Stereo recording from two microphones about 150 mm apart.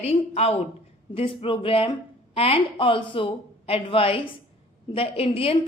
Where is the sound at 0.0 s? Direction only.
45° left (ahead or behind).